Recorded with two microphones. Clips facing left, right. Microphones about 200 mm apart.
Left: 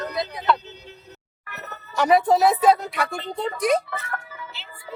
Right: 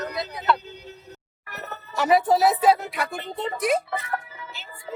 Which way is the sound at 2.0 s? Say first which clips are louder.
Left 2 dB; centre (ahead or behind).